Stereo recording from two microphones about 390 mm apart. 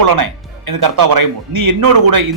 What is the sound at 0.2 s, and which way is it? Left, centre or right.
Speech, right.